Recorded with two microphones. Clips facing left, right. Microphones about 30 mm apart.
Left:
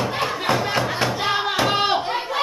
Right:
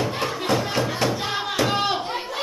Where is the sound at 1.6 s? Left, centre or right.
Centre.